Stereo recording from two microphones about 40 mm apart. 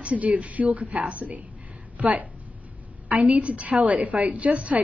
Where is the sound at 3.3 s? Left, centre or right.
Right.